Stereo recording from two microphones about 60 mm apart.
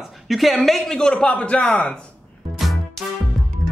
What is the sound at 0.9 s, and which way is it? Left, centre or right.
A man's voice, centre.